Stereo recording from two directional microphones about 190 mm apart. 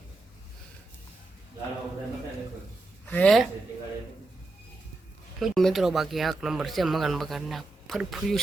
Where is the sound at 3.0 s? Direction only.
5° left (ahead or behind).